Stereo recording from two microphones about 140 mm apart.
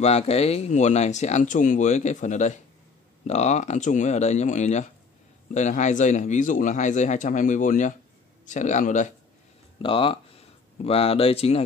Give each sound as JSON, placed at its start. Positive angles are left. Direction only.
{"t": 0.0, "sound": "speech", "side_deg": 50}
{"t": 9.8, "sound": "speech", "side_deg": 40}